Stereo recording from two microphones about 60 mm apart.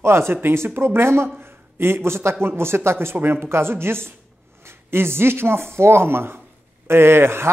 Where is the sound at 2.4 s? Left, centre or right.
Right.